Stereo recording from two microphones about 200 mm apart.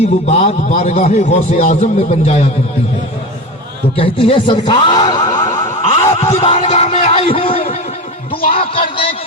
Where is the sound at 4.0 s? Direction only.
25° left (ahead or behind).